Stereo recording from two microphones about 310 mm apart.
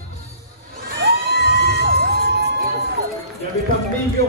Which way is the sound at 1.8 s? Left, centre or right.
Right.